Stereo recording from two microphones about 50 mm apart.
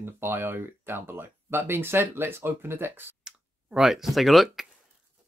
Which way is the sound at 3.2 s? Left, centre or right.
Centre.